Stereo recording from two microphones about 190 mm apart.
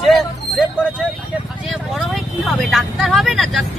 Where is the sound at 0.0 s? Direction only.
Centre (ahead or behind).